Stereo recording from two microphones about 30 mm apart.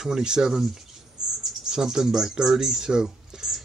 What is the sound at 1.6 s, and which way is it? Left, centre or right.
Speech, centre.